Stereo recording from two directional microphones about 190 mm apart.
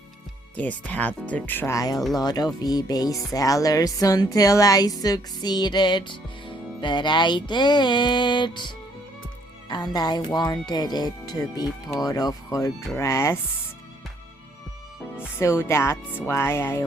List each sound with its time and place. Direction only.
0.5 s speech: 10° left (ahead or behind)
15.4 s speech: 15° left (ahead or behind)